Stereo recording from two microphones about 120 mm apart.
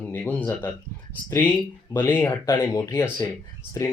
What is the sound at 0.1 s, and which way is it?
Speech, 15° left (ahead or behind).